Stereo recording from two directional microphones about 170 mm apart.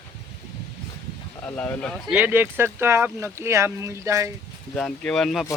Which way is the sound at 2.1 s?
10° right (ahead or behind).